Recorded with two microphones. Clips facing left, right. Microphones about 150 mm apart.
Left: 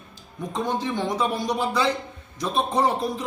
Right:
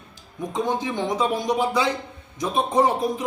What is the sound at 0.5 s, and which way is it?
A man's voice, 15° right (ahead or behind).